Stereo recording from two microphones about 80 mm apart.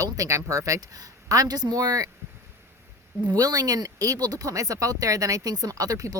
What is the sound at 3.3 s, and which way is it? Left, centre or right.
Speech, right.